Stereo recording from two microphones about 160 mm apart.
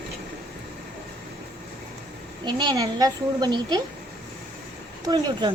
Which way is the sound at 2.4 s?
25° right (ahead or behind).